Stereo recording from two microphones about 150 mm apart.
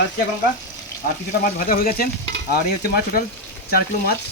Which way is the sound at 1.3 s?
75° left (ahead or behind).